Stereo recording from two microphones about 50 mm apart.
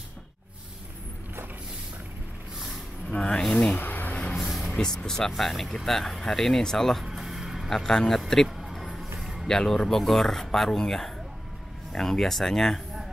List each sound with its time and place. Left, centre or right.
3.1 s speech: centre
3.7 s vehicle: left
4.5 s vehicle: centre
4.7 s speech: centre
7.1 s vehicle: centre
7.7 s speech: centre
8.5 s a sound: centre
9.2 s music: centre
9.5 s speech: centre